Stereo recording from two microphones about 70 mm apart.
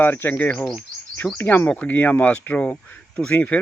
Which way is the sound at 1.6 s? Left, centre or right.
Centre.